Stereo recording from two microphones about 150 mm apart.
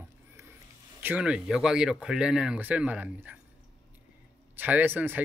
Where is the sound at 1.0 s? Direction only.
10° right (ahead or behind).